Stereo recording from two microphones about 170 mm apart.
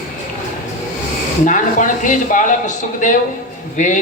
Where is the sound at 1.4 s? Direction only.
50° left (ahead or behind).